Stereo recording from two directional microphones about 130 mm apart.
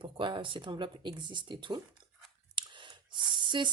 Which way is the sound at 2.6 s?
35° right (ahead or behind).